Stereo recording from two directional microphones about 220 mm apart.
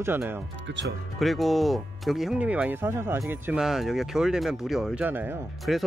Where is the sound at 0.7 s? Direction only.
55° right (ahead or behind).